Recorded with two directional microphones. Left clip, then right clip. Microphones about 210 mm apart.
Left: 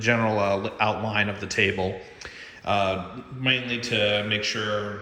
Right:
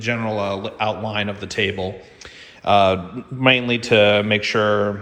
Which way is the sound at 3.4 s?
25° right (ahead or behind).